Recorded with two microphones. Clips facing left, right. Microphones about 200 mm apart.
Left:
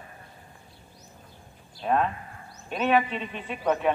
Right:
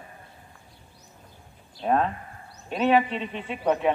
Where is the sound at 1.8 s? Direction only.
35° right (ahead or behind).